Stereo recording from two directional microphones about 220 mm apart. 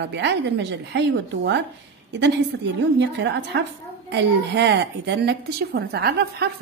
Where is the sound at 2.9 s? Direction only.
50° right (ahead or behind).